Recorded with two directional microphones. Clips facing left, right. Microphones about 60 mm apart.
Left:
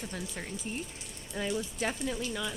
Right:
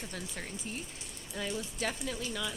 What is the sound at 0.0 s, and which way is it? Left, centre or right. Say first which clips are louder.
Speech: left 2 dB; centre.